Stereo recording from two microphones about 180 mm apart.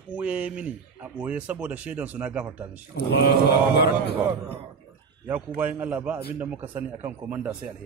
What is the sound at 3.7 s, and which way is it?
Speech, 65° left (ahead or behind).